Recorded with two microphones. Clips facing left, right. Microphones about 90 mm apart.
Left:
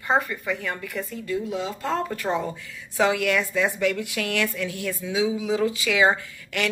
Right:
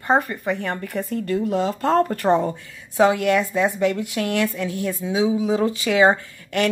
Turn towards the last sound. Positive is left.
turn(degrees=-35)  # may be behind; listen again after turning